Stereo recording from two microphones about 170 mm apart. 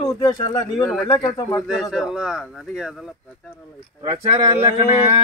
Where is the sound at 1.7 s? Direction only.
Centre (ahead or behind).